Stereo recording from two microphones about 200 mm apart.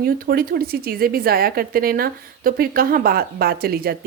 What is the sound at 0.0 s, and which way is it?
A woman's voice, 50° right (ahead or behind).